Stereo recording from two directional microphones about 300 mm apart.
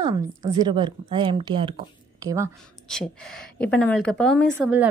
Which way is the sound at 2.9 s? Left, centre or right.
Centre.